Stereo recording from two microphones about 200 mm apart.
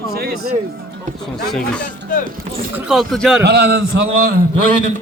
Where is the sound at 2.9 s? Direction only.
Centre (ahead or behind).